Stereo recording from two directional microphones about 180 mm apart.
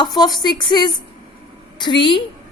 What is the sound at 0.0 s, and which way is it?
A woman's voice, 20° left (ahead or behind).